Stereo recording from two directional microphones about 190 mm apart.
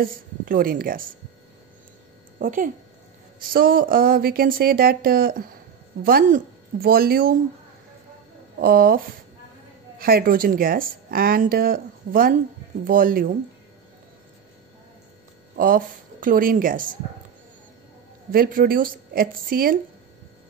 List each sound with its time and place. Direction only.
0.0 s speech: 50° right (ahead or behind)
2.3 s speech: 45° right (ahead or behind)
8.5 s speech: 50° right (ahead or behind)
15.5 s a woman's voice: 45° right (ahead or behind)
18.3 s speech: 50° right (ahead or behind)